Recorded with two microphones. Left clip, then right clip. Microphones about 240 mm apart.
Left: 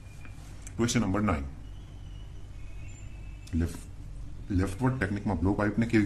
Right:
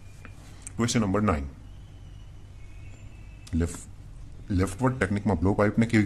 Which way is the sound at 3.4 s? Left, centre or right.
Right.